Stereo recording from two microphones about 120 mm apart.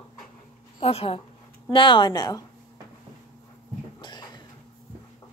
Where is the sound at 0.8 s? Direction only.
55° left (ahead or behind).